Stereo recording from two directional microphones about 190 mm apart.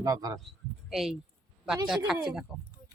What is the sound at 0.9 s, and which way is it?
A woman's voice, centre (ahead or behind).